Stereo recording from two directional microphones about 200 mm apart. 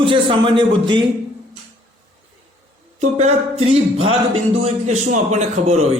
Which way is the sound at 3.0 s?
35° right (ahead or behind).